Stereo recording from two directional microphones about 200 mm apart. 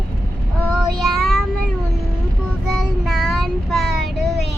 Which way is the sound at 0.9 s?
Centre (ahead or behind).